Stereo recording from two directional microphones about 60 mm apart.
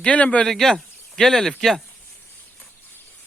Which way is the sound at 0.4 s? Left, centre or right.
Centre.